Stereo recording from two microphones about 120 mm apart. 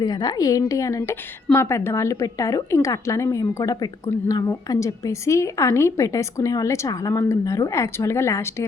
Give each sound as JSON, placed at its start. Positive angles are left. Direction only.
{"t": 0.0, "sound": "a woman's voice", "side_deg": 35}